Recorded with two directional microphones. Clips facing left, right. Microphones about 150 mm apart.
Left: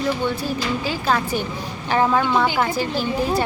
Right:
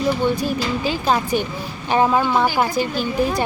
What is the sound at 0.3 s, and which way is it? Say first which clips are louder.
A woman's voice: right 2 dB; 15° right (ahead or behind).